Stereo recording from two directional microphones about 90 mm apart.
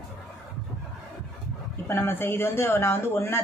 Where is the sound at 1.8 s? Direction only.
25° left (ahead or behind).